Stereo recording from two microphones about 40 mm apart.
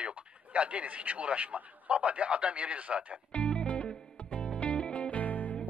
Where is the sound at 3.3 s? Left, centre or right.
Left.